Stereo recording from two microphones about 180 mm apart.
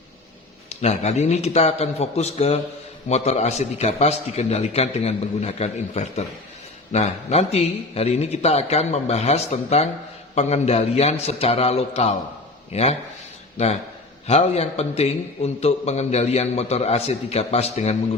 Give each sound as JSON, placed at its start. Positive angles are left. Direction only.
{"t": 0.7, "sound": "a man's voice", "side_deg": 40}